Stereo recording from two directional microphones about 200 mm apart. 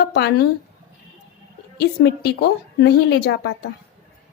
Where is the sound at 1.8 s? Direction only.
55° left (ahead or behind).